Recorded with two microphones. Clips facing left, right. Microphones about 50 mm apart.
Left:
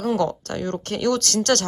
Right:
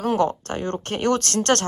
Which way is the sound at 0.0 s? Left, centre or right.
Right.